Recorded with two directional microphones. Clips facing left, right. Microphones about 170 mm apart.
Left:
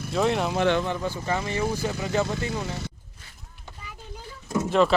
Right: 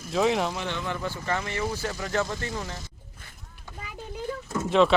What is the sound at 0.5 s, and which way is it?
Speech, 65° left (ahead or behind).